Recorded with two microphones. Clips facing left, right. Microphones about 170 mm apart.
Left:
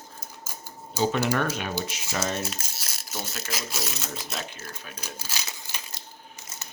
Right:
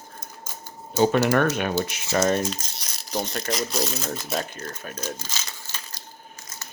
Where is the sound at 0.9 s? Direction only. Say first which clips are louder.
Right 5 dB; 55° right (ahead or behind).